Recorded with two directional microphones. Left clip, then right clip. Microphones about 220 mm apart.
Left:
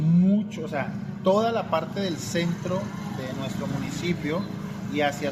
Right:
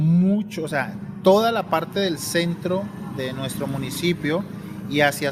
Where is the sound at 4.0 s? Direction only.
50° right (ahead or behind).